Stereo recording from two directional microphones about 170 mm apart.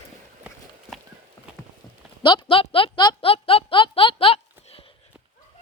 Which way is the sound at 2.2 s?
30° left (ahead or behind).